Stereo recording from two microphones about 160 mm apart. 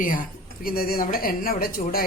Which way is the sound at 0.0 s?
60° left (ahead or behind).